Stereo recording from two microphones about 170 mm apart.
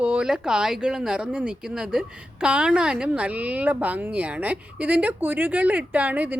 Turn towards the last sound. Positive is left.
turn(degrees=-10)  # may be behind; listen again after turning